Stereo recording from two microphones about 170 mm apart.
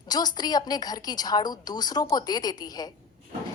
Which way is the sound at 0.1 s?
25° left (ahead or behind).